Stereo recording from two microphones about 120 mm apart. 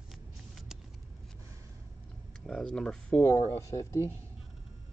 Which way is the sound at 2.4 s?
5° left (ahead or behind).